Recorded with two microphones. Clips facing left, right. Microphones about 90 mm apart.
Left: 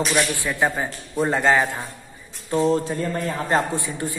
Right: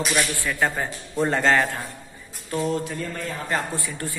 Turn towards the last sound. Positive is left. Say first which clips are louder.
# left 4 dB
turn(degrees=20)  # may be behind; listen again after turning